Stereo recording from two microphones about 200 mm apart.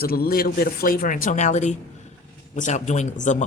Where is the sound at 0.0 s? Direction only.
50° left (ahead or behind).